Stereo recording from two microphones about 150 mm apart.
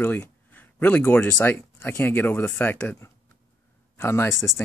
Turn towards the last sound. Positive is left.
turn(degrees=15)  # may be behind; listen again after turning